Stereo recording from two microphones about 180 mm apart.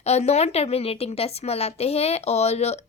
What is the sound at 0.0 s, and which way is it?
A woman's voice, 35° left (ahead or behind).